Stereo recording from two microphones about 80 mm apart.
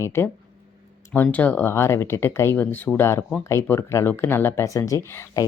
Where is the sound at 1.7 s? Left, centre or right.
Left.